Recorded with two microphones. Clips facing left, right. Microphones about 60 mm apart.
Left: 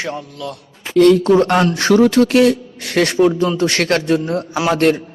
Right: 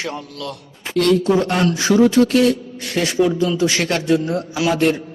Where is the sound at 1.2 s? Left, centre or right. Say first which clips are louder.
Left 4 dB; left.